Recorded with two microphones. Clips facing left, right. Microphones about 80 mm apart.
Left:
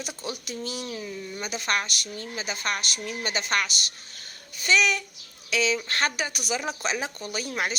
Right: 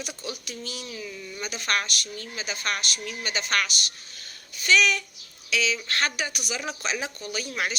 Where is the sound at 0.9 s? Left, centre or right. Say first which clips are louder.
Left 3 dB; left.